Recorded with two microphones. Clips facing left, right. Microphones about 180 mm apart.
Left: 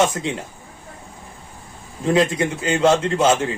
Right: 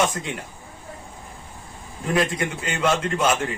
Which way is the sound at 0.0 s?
25° left (ahead or behind).